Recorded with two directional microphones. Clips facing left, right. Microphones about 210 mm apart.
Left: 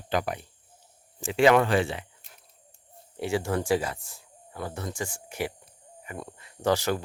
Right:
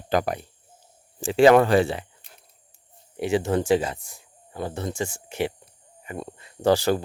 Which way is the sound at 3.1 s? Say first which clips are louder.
Right 5 dB; 20° right (ahead or behind).